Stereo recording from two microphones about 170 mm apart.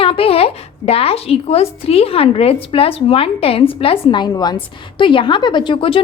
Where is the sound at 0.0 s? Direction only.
35° left (ahead or behind).